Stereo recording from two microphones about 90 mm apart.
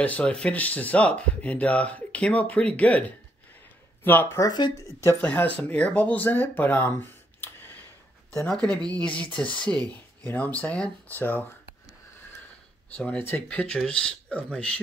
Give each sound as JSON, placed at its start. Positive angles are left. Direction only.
{"t": 0.0, "sound": "speech", "side_deg": 15}
{"t": 4.4, "sound": "speech", "side_deg": 50}
{"t": 5.2, "sound": "speech", "side_deg": 20}
{"t": 8.9, "sound": "speech", "side_deg": 15}
{"t": 12.9, "sound": "speech", "side_deg": 15}